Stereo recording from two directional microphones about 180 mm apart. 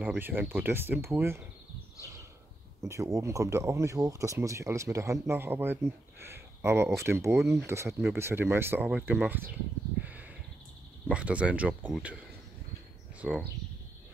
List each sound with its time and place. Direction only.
0.0 s speech: 10° right (ahead or behind)
2.8 s speech: 15° right (ahead or behind)
10.0 s a sound: 10° right (ahead or behind)
11.1 s speech: 5° right (ahead or behind)